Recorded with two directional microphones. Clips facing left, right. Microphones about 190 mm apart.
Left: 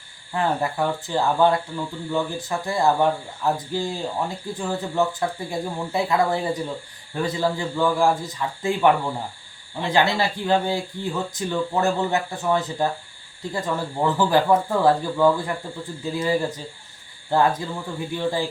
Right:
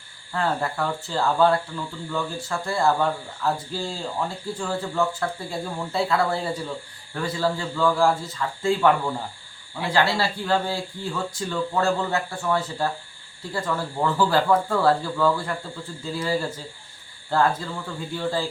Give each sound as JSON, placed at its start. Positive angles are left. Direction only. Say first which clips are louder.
{"t": 0.3, "sound": "speech", "louder": "left 2 dB", "side_deg": 20}